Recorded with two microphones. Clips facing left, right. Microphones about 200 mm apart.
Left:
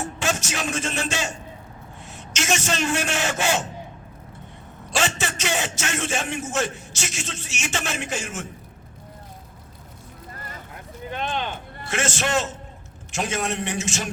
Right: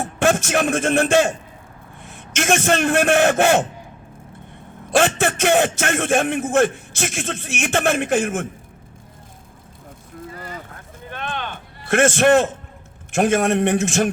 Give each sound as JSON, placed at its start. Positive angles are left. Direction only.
{"t": 0.0, "sound": "a man's voice", "side_deg": -55}
{"t": 4.9, "sound": "a man's voice", "side_deg": -55}
{"t": 11.2, "sound": "a sound", "side_deg": -55}
{"t": 11.9, "sound": "a man's voice", "side_deg": -55}